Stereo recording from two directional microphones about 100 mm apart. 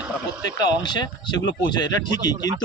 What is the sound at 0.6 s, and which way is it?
Speech, 45° left (ahead or behind).